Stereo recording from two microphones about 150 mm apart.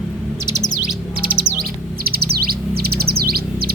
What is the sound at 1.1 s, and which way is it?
Bird, 75° right (ahead or behind).